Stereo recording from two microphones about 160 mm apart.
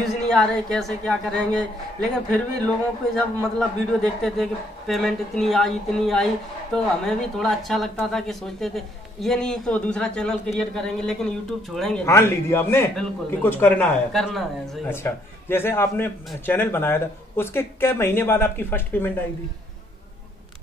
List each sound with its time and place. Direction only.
0.3 s speech: 5° left (ahead or behind)
3.5 s speech: centre (ahead or behind)
12.1 s speech: 15° left (ahead or behind)
14.9 s speech: 15° left (ahead or behind)